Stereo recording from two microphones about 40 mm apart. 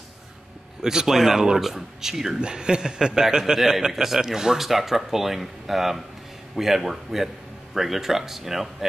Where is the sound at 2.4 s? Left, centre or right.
Right.